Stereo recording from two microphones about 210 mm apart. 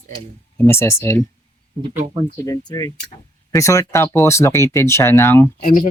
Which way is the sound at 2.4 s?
15° left (ahead or behind).